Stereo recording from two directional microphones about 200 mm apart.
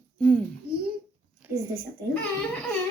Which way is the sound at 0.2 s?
5° left (ahead or behind).